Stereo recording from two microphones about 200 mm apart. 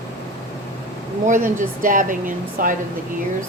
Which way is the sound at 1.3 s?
40° right (ahead or behind).